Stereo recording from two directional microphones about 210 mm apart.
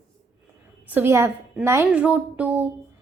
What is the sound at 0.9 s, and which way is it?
A woman's voice, 10° right (ahead or behind).